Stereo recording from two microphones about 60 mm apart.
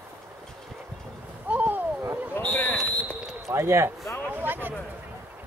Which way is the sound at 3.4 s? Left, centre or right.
Right.